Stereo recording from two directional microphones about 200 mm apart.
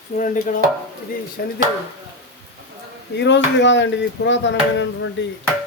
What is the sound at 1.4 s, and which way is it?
Speech, 50° left (ahead or behind).